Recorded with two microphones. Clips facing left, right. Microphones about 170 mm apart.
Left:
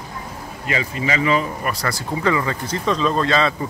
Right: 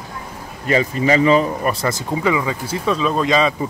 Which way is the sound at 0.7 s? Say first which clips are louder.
Right 7 dB; 40° right (ahead or behind).